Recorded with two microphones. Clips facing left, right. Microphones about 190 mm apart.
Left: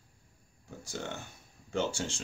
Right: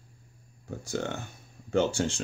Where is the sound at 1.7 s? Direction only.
60° right (ahead or behind).